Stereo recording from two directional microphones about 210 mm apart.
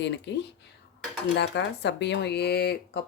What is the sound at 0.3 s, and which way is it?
Speech, 55° left (ahead or behind).